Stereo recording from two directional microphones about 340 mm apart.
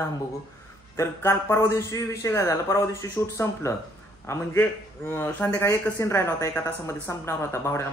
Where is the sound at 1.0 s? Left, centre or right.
Centre.